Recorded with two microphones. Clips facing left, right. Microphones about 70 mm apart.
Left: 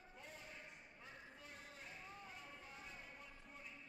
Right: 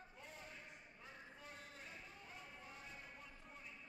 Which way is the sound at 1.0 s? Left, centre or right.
Centre.